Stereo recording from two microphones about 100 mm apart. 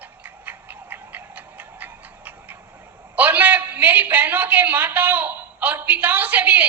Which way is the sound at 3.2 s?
15° right (ahead or behind).